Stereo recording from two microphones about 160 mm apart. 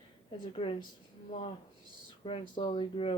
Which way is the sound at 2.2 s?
35° left (ahead or behind).